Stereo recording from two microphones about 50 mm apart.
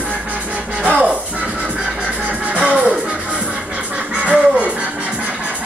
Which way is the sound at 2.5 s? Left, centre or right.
Right.